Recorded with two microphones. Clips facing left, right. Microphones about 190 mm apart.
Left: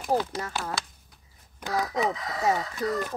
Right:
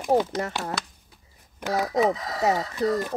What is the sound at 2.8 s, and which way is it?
Speech, 25° right (ahead or behind).